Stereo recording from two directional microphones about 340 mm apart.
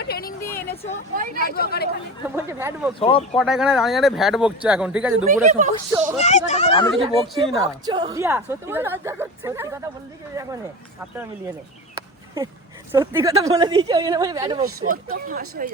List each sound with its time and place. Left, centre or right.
0.0 s vehicle: left
1.4 s speech: left
2.3 s speech: centre
3.0 s speech: centre
3.3 s speech: centre
5.3 s speech: right
6.1 s speech: centre
6.9 s speech: centre
7.7 s speech: centre
11.9 s a sound: centre
12.9 s speech: centre
14.8 s speech: right